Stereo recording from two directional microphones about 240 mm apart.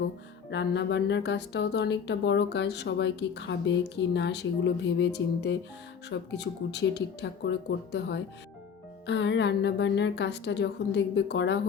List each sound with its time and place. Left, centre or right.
0.5 s speech: left